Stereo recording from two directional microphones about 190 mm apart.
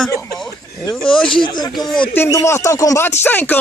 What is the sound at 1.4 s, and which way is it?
Speech, 20° left (ahead or behind).